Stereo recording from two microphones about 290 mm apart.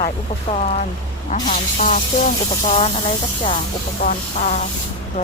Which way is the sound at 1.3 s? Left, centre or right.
Left.